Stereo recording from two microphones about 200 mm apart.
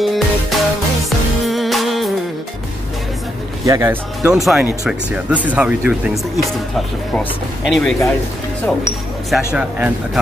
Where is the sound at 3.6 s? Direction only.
15° right (ahead or behind).